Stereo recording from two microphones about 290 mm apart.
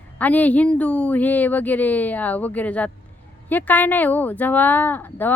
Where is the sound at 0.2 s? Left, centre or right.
Centre.